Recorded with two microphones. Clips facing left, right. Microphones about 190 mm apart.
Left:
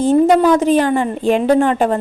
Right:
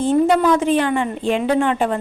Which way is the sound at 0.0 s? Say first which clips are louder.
Left 4 dB; 40° left (ahead or behind).